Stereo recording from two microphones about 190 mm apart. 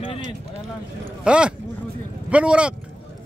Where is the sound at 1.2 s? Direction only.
5° right (ahead or behind).